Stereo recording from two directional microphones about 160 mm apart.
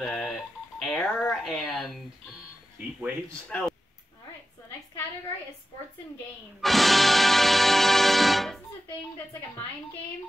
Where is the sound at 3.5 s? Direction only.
5° left (ahead or behind).